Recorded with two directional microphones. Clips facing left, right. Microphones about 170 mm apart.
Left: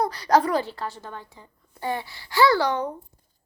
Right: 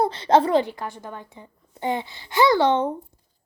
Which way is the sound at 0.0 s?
25° right (ahead or behind).